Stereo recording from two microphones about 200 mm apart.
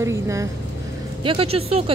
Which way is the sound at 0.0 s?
15° right (ahead or behind).